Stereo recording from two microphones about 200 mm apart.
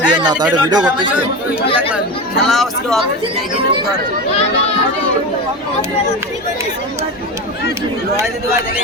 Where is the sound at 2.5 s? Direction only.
Centre (ahead or behind).